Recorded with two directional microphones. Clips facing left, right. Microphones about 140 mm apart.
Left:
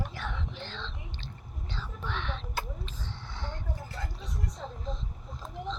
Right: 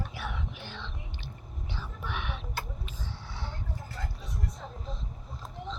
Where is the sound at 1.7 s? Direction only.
10° right (ahead or behind).